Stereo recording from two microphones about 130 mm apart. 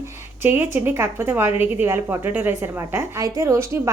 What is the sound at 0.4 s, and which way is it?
A woman's voice, 15° right (ahead or behind).